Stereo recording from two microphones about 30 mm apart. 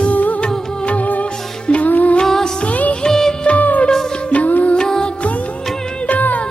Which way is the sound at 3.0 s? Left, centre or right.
Centre.